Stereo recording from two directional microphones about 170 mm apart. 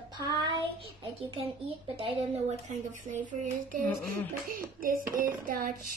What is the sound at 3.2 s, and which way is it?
Hands, 50° right (ahead or behind).